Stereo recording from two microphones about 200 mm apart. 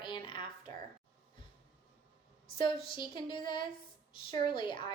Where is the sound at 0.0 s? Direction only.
25° left (ahead or behind).